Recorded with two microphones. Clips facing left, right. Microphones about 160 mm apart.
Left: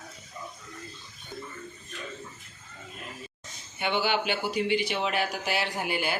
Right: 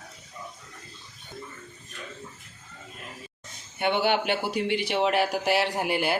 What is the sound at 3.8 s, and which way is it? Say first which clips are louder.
Speech: right 3 dB; 55° right (ahead or behind).